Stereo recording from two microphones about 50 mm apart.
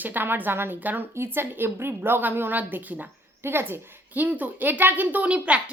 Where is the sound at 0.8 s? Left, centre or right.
Right.